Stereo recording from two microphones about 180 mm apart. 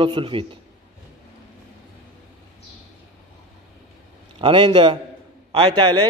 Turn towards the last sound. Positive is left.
turn(degrees=-25)  # may be behind; listen again after turning